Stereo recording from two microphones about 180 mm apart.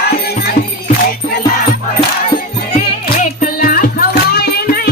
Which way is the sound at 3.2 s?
50° left (ahead or behind).